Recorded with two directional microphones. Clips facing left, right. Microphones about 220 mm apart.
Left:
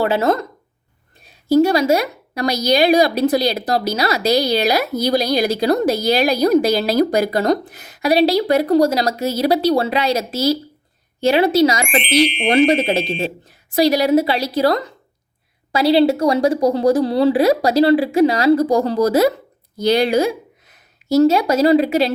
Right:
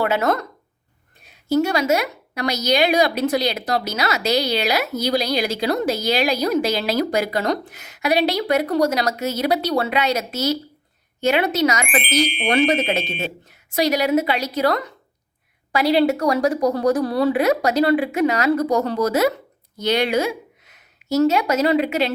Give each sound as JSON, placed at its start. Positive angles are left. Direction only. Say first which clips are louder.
{"t": 0.0, "sound": "a woman's voice", "louder": "left 3 dB", "side_deg": 30}